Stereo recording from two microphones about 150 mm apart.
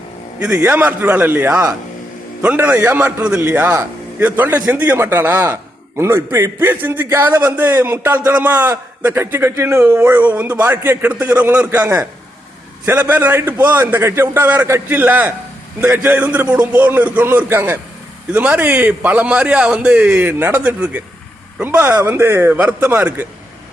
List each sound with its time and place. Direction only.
0.3 s a man's voice: 10° right (ahead or behind)